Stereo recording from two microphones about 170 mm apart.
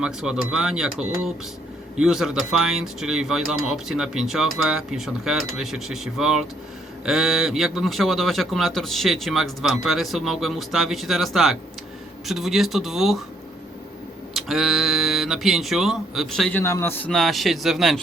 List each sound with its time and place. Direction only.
0.0 s a man's voice: 5° right (ahead or behind)
14.3 s a man's voice: centre (ahead or behind)
17.1 s a man's voice: centre (ahead or behind)